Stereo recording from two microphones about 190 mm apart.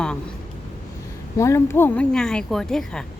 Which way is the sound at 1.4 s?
15° left (ahead or behind).